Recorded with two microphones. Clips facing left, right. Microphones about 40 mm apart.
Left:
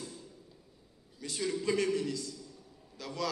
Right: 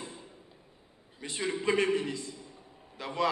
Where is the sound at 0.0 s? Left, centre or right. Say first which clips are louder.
Right 2 dB; right.